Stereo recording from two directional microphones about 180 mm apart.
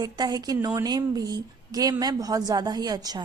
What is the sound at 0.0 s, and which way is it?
Speech, 20° right (ahead or behind).